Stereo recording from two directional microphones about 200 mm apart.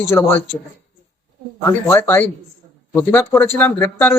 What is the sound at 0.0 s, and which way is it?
Speech, 15° left (ahead or behind).